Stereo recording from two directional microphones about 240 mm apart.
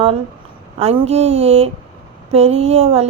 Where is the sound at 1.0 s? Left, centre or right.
Right.